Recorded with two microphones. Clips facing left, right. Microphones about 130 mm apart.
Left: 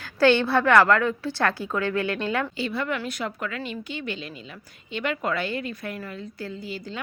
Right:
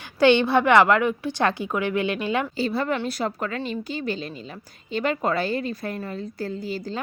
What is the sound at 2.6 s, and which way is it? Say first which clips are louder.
A woman's voice: right 4 dB; 35° right (ahead or behind).